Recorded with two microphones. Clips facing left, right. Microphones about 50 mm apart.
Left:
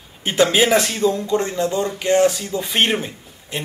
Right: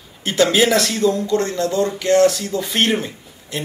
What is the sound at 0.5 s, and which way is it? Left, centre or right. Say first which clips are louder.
Speech: even; centre.